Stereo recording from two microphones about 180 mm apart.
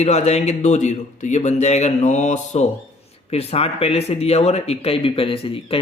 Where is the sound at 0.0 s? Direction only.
40° left (ahead or behind).